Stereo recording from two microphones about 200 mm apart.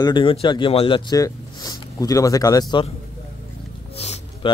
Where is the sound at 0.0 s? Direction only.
25° left (ahead or behind).